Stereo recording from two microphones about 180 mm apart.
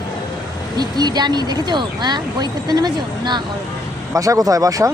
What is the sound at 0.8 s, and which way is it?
Speech, 20° right (ahead or behind).